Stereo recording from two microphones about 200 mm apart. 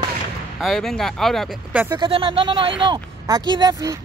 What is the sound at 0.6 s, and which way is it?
Speech, centre (ahead or behind).